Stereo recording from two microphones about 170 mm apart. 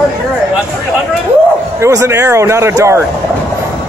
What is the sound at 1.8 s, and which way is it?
Speech, 15° right (ahead or behind).